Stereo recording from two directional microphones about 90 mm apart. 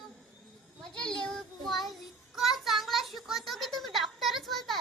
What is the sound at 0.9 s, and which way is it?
Child singing, 10° left (ahead or behind).